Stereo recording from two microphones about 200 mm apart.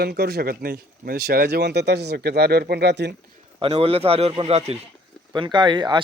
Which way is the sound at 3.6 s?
30° right (ahead or behind).